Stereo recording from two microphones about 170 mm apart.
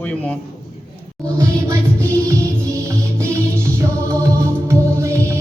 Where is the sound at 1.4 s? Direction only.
20° right (ahead or behind).